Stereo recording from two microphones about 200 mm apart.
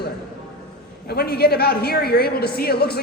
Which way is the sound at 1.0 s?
50° left (ahead or behind).